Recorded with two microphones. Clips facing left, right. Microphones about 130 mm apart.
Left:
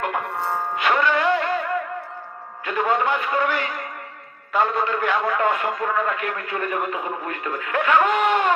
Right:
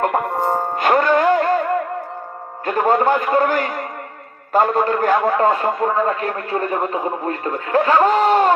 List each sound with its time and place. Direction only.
0.0 s music: 45° right (ahead or behind)
2.6 s a man's voice: 40° right (ahead or behind)